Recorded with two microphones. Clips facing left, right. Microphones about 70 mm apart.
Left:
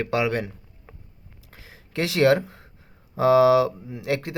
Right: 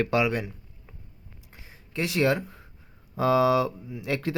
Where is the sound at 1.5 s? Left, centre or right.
Left.